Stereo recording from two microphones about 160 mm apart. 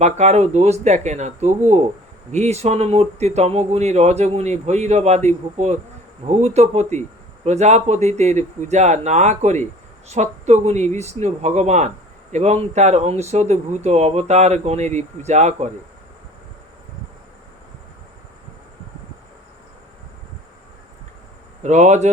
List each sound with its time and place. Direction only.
0.0 s speech: 45° right (ahead or behind)
21.6 s speech: 45° right (ahead or behind)